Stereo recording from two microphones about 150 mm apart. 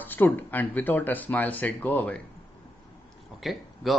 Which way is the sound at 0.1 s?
10° left (ahead or behind).